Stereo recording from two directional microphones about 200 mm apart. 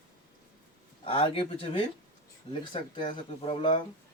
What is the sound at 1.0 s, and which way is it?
Speech, 30° left (ahead or behind).